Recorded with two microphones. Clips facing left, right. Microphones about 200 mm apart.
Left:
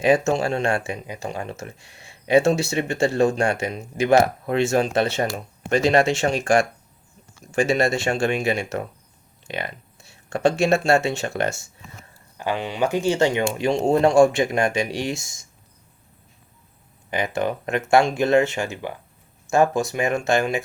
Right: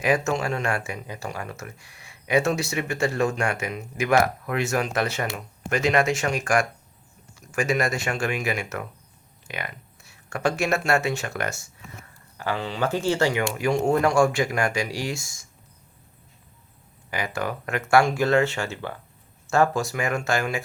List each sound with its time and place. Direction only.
0.0 s speech: 25° left (ahead or behind)
17.1 s speech: 20° left (ahead or behind)